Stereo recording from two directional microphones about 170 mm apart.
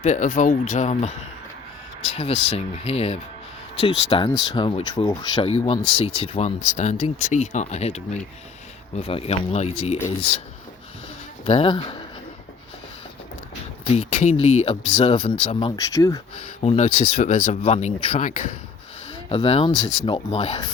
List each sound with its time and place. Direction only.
0.0 s speech: 45° left (ahead or behind)
2.5 s speech: 35° left (ahead or behind)
11.4 s speech: 35° left (ahead or behind)
13.9 s speech: 40° left (ahead or behind); by 16.2 s 20° left (ahead or behind)
16.4 s speech: 35° left (ahead or behind)
19.3 s speech: 35° left (ahead or behind)